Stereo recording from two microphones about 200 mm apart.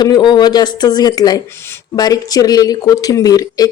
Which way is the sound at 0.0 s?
20° left (ahead or behind).